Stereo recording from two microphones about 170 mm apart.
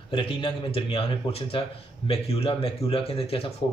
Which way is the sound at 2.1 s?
35° left (ahead or behind).